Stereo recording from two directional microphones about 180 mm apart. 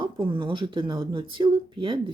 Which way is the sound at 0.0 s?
30° right (ahead or behind).